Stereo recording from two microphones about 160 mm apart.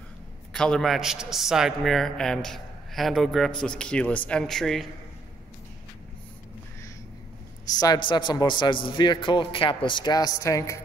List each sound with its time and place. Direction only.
0.5 s a man's voice: 5° left (ahead or behind)
7.7 s a man's voice: 25° left (ahead or behind)